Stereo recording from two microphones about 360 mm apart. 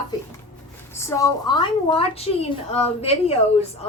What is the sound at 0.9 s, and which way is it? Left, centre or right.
A woman's voice, centre.